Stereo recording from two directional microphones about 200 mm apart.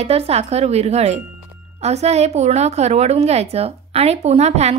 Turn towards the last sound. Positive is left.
turn(degrees=-35)  # may be behind; listen again after turning